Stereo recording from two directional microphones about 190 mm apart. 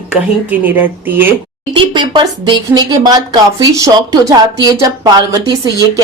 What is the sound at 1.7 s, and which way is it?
Speech, 25° right (ahead or behind).